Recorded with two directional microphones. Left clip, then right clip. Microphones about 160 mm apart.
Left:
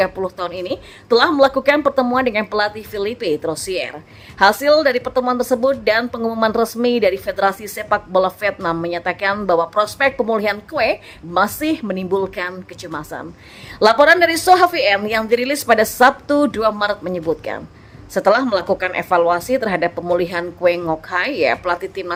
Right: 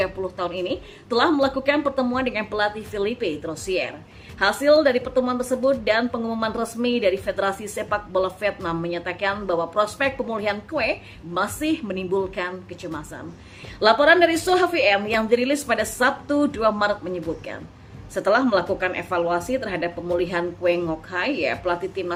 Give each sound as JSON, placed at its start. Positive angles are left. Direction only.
{"t": 0.0, "sound": "a woman's voice", "side_deg": 40}